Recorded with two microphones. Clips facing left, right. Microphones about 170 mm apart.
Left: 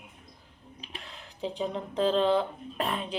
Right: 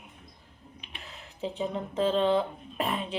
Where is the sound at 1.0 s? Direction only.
5° right (ahead or behind).